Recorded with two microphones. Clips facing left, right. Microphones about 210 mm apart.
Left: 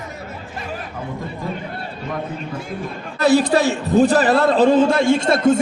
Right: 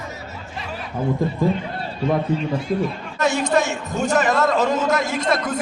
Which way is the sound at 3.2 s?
35° left (ahead or behind).